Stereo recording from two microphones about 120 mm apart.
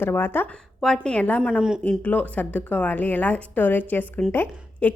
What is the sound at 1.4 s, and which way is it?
Speech, 5° right (ahead or behind).